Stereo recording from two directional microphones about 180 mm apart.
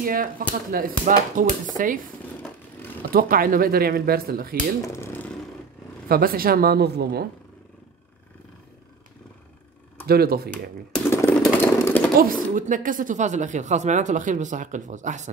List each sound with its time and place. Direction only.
0.0 s speech: 50° right (ahead or behind)
2.4 s vehicle: 10° left (ahead or behind)
3.1 s speech: 55° right (ahead or behind)
4.8 s speech: 15° left (ahead or behind)
6.0 s speech: 55° right (ahead or behind)
10.0 s speech: 60° right (ahead or behind)
11.1 s vehicle: 15° left (ahead or behind)
12.2 s speech: 50° right (ahead or behind)